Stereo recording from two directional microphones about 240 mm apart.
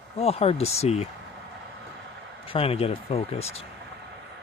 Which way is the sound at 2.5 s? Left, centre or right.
Left.